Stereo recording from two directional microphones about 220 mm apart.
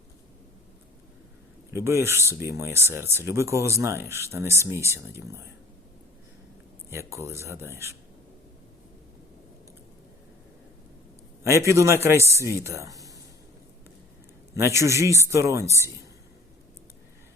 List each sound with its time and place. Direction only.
1.7 s speech: 10° right (ahead or behind)
6.9 s speech: 10° right (ahead or behind)
11.4 s speech: 15° right (ahead or behind)
14.5 s speech: 10° right (ahead or behind)